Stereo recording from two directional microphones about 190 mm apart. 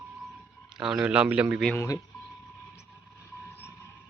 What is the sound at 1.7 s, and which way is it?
Speech, 15° left (ahead or behind).